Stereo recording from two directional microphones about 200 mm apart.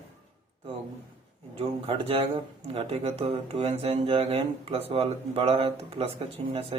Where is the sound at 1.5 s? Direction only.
30° right (ahead or behind).